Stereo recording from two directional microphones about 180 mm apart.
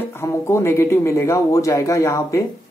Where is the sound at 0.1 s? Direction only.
15° left (ahead or behind).